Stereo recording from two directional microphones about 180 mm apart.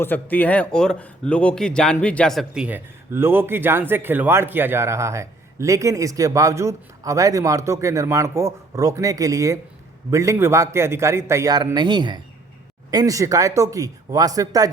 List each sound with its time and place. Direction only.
0.0 s speech: 10° left (ahead or behind); by 14.7 s 20° right (ahead or behind)